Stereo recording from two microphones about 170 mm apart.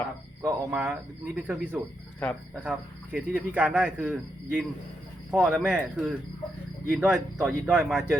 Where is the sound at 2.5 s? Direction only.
10° right (ahead or behind).